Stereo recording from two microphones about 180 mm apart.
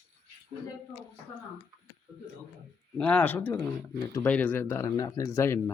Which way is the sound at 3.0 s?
5° left (ahead or behind).